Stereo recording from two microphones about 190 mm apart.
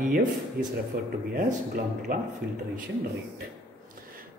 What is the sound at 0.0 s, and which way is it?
Speech, 45° right (ahead or behind).